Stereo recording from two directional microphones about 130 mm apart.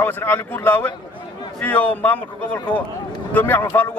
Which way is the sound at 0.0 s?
15° left (ahead or behind).